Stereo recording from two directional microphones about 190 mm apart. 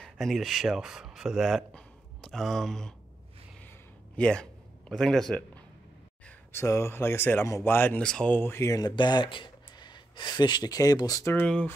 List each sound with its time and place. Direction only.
0.0 s speech: centre (ahead or behind)
4.2 s a man's voice: 5° left (ahead or behind)